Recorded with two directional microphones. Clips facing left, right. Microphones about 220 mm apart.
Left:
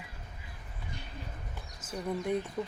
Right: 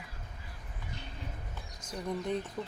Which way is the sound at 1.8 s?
5° left (ahead or behind).